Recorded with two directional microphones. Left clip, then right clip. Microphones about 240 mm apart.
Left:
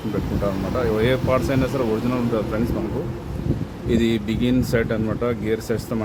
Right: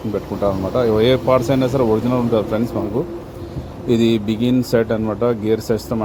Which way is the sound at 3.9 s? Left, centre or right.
Centre.